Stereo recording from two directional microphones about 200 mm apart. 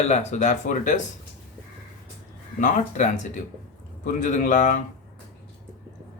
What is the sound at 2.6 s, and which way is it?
Speech, 40° left (ahead or behind).